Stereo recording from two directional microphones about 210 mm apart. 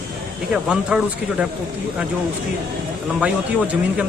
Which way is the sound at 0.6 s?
5° right (ahead or behind).